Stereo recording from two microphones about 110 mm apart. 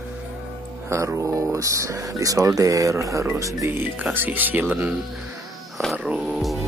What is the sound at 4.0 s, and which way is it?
Speech, 15° right (ahead or behind).